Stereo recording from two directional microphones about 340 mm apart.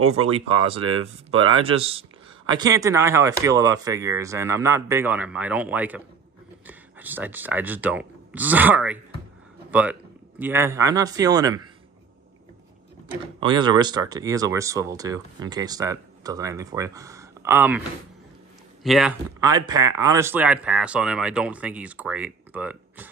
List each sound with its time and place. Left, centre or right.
0.1 s a man's voice: centre
13.4 s speech: centre